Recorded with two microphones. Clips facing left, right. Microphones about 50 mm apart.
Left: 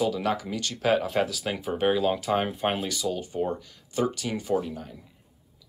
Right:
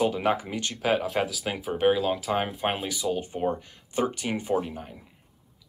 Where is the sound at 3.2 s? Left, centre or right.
Right.